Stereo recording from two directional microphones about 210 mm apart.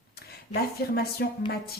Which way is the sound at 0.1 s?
50° left (ahead or behind).